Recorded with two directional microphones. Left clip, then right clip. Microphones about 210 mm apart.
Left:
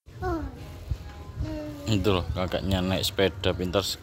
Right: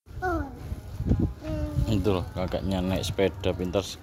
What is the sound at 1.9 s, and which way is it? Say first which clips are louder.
Speech: left 2 dB; centre (ahead or behind).